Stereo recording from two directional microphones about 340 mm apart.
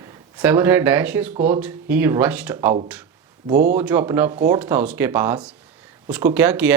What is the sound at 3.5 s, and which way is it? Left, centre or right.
Speech, right.